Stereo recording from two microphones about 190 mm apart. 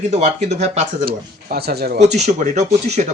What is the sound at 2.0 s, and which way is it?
Speech, 35° right (ahead or behind).